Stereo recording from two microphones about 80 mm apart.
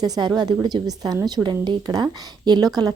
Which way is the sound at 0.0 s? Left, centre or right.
Right.